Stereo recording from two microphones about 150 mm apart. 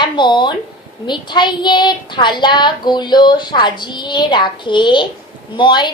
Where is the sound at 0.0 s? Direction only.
30° left (ahead or behind).